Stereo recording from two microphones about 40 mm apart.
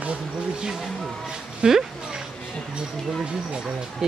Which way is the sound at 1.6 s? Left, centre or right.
Right.